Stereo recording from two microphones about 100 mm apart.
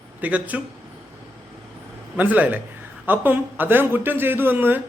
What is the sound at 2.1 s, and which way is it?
Speech, 15° right (ahead or behind).